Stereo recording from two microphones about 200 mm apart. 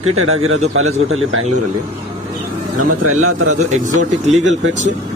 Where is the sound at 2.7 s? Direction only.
90° right.